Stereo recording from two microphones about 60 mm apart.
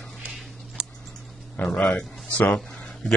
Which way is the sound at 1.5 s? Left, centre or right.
Left.